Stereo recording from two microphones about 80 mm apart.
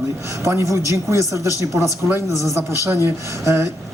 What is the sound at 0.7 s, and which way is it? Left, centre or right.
Speech, right.